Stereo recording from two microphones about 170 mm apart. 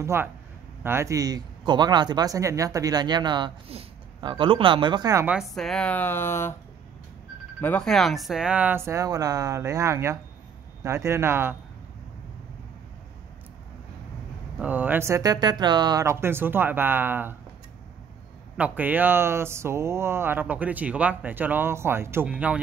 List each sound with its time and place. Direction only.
0.0 s speech: 15° right (ahead or behind)
5.2 s speech: 5° right (ahead or behind); by 6.5 s 15° left (ahead or behind)
7.6 s speech: 5° left (ahead or behind); by 11.5 s 15° right (ahead or behind)
14.6 s speech: 10° right (ahead or behind)
18.6 s speech: 10° right (ahead or behind)